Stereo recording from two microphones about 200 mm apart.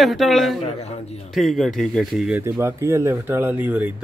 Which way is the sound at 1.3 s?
Centre (ahead or behind).